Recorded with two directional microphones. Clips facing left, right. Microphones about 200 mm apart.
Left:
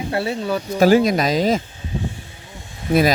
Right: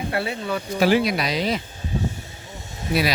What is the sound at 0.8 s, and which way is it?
Speech, 45° left (ahead or behind).